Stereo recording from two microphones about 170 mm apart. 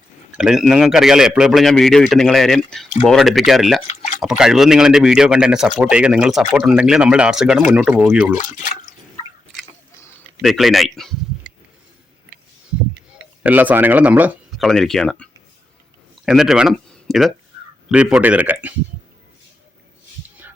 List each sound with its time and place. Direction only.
0.3 s a man's voice: 5° right (ahead or behind)
8.4 s speech: 45° left (ahead or behind)
10.4 s a man's voice: centre (ahead or behind)
13.4 s speech: 10° right (ahead or behind)